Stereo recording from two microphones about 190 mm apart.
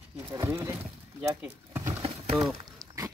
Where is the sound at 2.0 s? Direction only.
30° right (ahead or behind).